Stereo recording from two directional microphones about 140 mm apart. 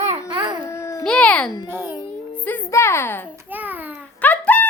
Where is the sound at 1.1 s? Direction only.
10° left (ahead or behind).